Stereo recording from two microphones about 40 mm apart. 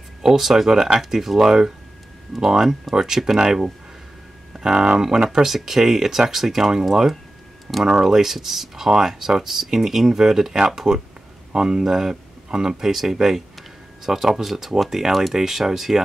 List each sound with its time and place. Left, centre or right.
0.2 s speech: centre
2.5 s speech: centre